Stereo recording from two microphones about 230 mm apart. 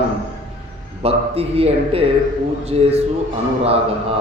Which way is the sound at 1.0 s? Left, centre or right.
Right.